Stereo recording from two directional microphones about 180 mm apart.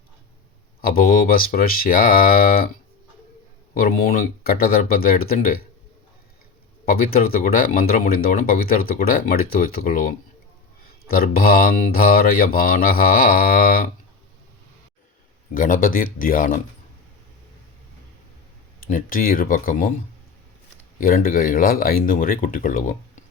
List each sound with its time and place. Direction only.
0.8 s speech: 55° left (ahead or behind)
3.8 s speech: 55° left (ahead or behind)
6.8 s speech: 55° left (ahead or behind)
15.5 s speech: 50° left (ahead or behind)
18.9 s speech: 50° left (ahead or behind)
21.0 s speech: 55° left (ahead or behind)